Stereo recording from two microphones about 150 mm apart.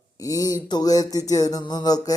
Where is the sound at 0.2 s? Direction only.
25° left (ahead or behind).